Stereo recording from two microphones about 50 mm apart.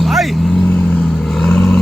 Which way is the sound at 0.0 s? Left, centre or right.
Centre.